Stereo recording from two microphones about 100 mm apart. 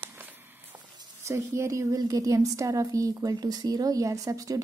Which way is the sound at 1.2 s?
30° right (ahead or behind).